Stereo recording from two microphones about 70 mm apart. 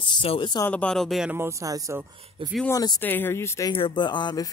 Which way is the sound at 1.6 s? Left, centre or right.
Right.